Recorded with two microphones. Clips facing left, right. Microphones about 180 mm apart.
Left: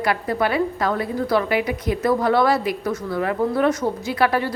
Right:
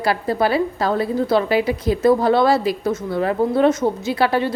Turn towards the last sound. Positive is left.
turn(degrees=-25)  # may be behind; listen again after turning